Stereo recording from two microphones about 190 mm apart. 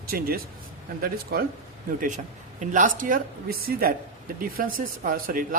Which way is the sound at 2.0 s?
40° right (ahead or behind).